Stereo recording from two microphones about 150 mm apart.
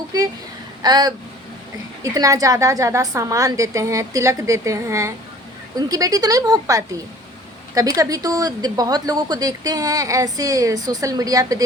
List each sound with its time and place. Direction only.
0.8 s a woman's voice: 25° right (ahead or behind)
2.1 s a woman's voice: 20° right (ahead or behind)